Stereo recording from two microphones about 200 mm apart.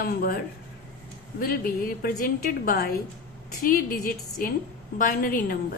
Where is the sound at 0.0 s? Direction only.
50° left (ahead or behind).